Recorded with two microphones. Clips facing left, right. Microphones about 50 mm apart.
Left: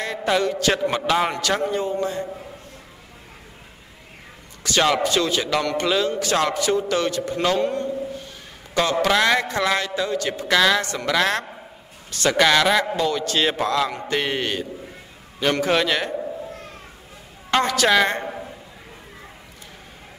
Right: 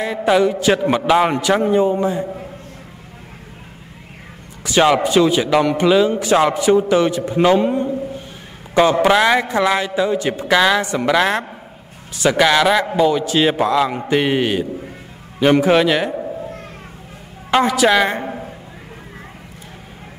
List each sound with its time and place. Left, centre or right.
0.0 s a man's voice: centre
4.6 s a man's voice: centre
14.9 s a sound: centre
17.5 s a man's voice: centre